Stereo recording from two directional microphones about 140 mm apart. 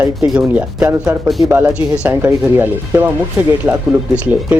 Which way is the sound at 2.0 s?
15° right (ahead or behind).